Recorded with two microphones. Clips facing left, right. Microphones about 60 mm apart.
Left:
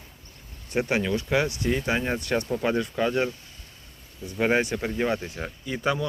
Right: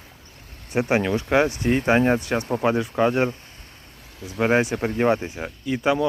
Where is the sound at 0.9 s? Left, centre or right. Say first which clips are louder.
Right 6 dB; right.